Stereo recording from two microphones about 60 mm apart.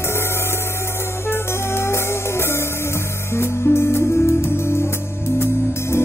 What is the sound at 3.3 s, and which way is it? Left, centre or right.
Music, left.